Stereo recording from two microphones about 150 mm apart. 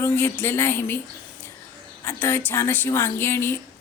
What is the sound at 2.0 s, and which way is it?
Speech, 15° left (ahead or behind).